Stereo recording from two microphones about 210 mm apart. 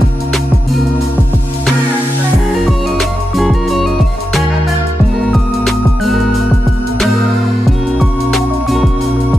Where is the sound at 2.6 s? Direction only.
Centre (ahead or behind).